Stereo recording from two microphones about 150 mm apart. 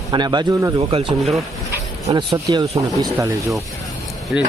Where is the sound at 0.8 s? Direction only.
40° right (ahead or behind).